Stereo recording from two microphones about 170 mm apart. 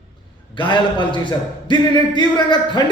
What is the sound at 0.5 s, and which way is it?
A man's voice, 25° left (ahead or behind).